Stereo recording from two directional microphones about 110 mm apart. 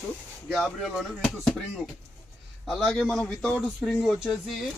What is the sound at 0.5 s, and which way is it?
Speech, centre (ahead or behind).